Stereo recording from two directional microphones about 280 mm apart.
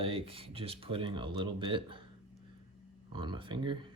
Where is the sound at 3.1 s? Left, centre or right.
Centre.